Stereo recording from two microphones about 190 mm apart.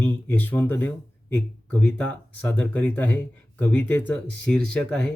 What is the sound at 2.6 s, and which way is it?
Speech, 10° left (ahead or behind).